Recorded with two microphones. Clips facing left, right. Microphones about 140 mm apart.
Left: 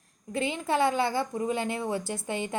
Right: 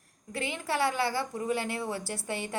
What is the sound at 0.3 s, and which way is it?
A woman's voice, 20° left (ahead or behind).